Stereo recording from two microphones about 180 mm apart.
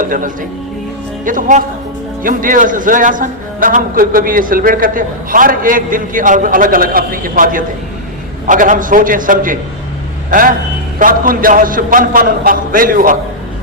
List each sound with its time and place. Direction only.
0.0 s a man's voice: 50° right (ahead or behind)